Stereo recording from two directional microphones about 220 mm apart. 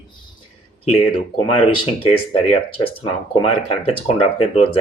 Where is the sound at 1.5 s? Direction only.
25° left (ahead or behind).